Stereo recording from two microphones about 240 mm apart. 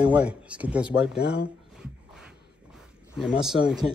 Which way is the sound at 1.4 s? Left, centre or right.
Centre.